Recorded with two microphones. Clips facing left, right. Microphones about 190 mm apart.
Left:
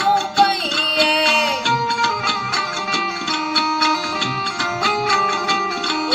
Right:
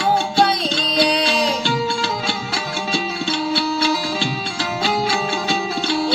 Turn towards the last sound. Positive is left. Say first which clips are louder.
# right 1 dB
turn(degrees=-30)  # may be behind; listen again after turning